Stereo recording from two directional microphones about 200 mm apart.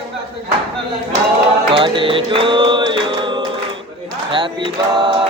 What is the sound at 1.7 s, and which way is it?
Music, 25° right (ahead or behind).